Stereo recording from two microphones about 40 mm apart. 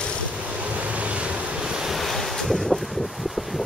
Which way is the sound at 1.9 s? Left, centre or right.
Centre.